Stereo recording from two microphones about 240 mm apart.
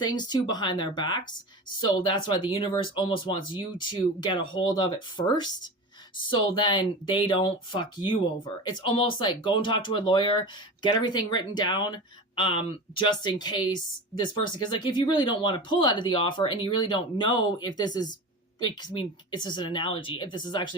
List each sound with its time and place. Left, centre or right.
0.0 s speech: centre